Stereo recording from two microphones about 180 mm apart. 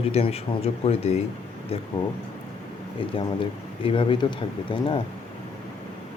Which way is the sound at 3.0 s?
30° left (ahead or behind).